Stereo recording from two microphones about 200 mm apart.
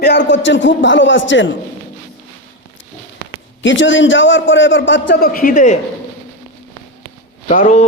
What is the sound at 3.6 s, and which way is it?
A man's voice, 70° left (ahead or behind).